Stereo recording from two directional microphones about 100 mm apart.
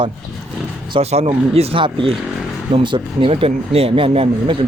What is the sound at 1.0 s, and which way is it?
Speech, 90° right.